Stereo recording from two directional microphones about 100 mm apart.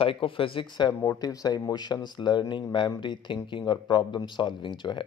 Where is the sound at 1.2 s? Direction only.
35° left (ahead or behind).